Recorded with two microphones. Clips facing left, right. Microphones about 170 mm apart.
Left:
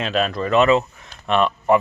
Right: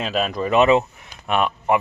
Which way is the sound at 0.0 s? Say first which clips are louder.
Left 1 dB; 5° right (ahead or behind).